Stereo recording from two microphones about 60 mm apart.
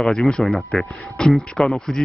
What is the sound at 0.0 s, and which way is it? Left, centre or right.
Speech, centre.